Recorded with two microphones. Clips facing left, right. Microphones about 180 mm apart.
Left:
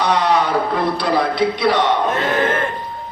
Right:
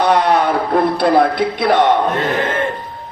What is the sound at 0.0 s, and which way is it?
Speech, 55° right (ahead or behind).